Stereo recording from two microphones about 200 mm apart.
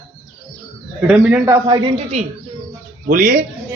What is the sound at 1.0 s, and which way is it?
Speech, 5° right (ahead or behind).